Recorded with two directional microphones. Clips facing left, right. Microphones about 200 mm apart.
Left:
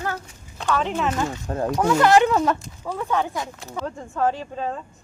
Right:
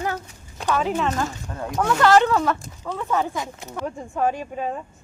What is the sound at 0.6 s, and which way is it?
Speech, 10° right (ahead or behind).